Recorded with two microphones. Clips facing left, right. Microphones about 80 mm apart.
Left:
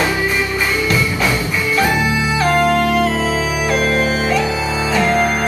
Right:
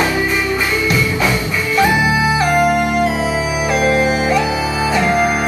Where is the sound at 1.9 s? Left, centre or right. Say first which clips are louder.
Right 3 dB; centre.